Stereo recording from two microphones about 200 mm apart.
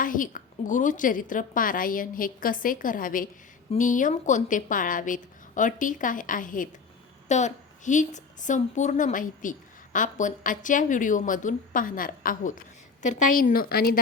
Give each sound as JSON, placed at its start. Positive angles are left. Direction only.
{"t": 0.0, "sound": "a woman's voice", "side_deg": 40}